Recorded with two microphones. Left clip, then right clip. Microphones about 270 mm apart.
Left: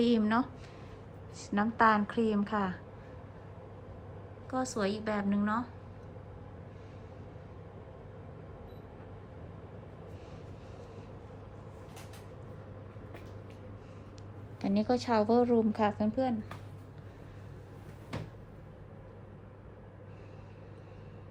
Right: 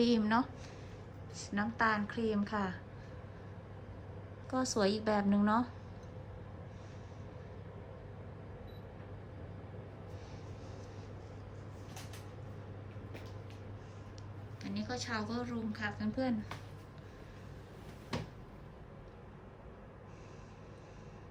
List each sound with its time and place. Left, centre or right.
0.0 s a woman's voice: centre
4.5 s a woman's voice: centre
14.6 s a woman's voice: centre